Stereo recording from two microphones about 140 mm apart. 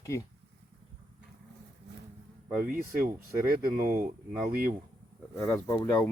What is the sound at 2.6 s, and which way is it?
Speech, 90° right.